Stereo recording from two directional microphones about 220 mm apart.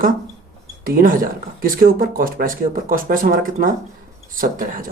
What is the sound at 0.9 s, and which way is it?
Speech, 40° right (ahead or behind).